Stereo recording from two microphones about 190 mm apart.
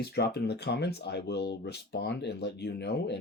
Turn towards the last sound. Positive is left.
turn(degrees=60)  # may be behind; listen again after turning